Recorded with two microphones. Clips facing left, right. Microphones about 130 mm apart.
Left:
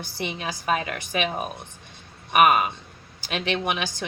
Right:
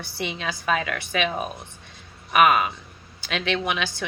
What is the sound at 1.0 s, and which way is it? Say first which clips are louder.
Speech: right 1 dB; 15° left (ahead or behind).